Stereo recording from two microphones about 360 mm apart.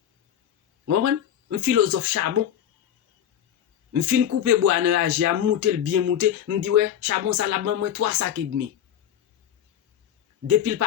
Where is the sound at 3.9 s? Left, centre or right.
Right.